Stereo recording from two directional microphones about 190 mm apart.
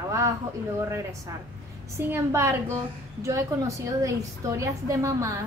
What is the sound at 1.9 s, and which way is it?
A woman's voice, 10° right (ahead or behind).